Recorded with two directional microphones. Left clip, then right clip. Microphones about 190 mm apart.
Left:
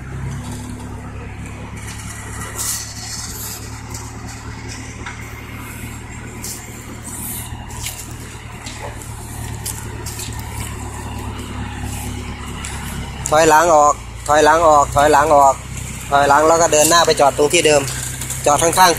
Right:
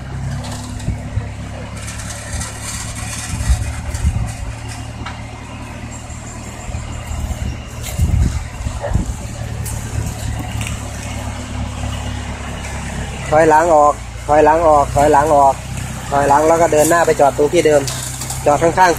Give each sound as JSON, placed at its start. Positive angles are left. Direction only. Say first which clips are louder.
{"t": 13.3, "sound": "speech", "louder": "right 1 dB", "side_deg": 5}
{"t": 13.7, "sound": "vehicle", "louder": "right 1 dB", "side_deg": 15}
{"t": 14.3, "sound": "speech", "louder": "right 1 dB", "side_deg": 5}
{"t": 14.6, "sound": "speech", "louder": "even", "side_deg": 20}
{"t": 15.0, "sound": "speech", "louder": "right 1 dB", "side_deg": 0}
{"t": 15.2, "sound": "speech", "louder": "even", "side_deg": 20}
{"t": 16.7, "sound": "speech", "louder": "right 1 dB", "side_deg": 0}